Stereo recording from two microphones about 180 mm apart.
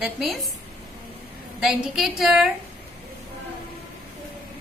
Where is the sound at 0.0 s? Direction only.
Centre (ahead or behind).